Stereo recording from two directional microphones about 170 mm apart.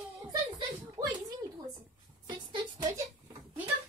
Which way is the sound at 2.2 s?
25° right (ahead or behind).